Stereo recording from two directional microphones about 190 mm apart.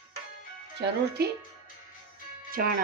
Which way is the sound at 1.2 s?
60° right (ahead or behind).